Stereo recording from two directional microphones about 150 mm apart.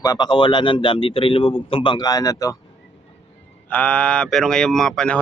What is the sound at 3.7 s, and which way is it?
Speech, 10° left (ahead or behind).